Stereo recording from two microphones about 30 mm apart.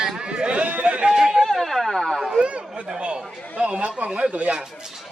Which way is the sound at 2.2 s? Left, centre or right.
Right.